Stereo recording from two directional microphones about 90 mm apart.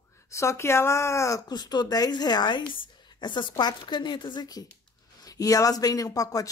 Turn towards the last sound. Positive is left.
turn(degrees=40)  # may be behind; listen again after turning